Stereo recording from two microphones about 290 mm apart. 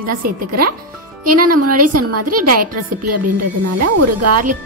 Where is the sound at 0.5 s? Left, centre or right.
Right.